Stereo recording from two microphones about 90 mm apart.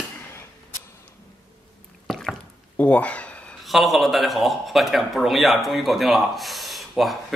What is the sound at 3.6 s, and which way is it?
Speech, centre (ahead or behind).